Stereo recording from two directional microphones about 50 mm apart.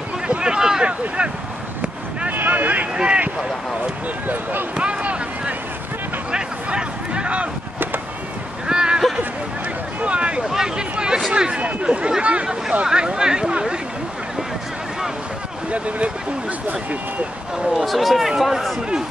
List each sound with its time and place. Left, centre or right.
0.3 s speech: centre
2.2 s a sound: right
2.9 s speech: centre
4.3 s speech: right
4.7 s a sound: right
6.3 s speech: centre
8.6 s a sound: centre
11.3 s speech: centre
15.7 s speech: right
17.7 s speech: centre